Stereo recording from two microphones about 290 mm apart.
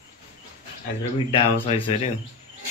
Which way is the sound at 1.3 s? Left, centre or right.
Centre.